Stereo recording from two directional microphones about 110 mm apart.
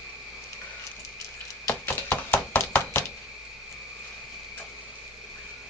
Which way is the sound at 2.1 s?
15° left (ahead or behind).